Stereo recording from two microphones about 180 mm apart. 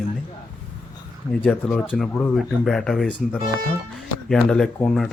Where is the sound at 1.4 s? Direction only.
5° left (ahead or behind).